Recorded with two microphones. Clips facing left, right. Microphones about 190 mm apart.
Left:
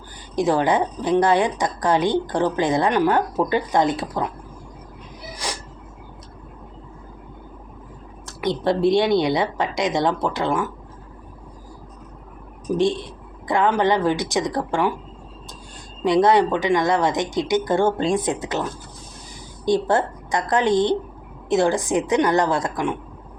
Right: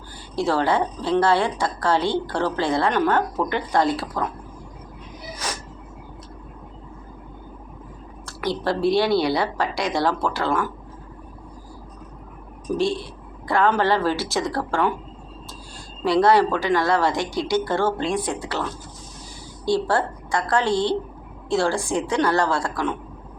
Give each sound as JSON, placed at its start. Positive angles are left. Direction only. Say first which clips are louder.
{"t": 0.3, "sound": "a woman's voice", "louder": "left 2 dB", "side_deg": 15}
{"t": 8.3, "sound": "a woman's voice", "louder": "left 3 dB", "side_deg": 20}
{"t": 12.7, "sound": "a woman's voice", "louder": "left 2 dB", "side_deg": 20}
{"t": 16.0, "sound": "a woman's voice", "louder": "left 1 dB", "side_deg": 20}